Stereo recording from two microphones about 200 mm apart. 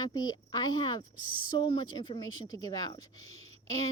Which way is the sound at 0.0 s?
20° left (ahead or behind).